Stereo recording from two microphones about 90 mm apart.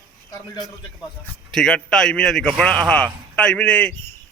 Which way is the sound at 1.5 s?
5° left (ahead or behind).